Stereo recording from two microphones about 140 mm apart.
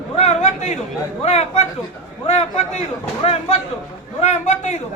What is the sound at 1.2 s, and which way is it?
A man's voice, 50° left (ahead or behind).